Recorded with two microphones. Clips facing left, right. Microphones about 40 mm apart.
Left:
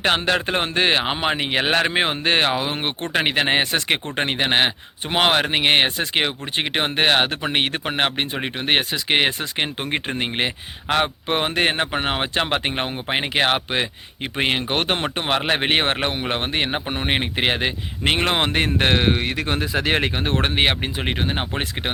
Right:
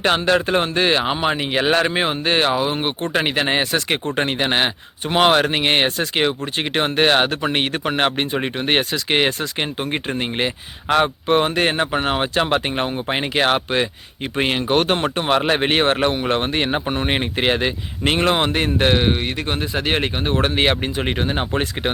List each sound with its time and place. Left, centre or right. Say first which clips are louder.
0.0 s speech: right 3 dB; left
9.6 s speech: right 1 dB; left
10.8 s speech: right 4 dB; left
16.3 s speech: right 3 dB; centre; by 18.9 s left
20.3 s speech: right 5 dB; left
20.6 s speech: right 2 dB; centre